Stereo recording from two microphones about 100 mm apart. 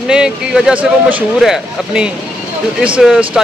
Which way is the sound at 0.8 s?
15° right (ahead or behind).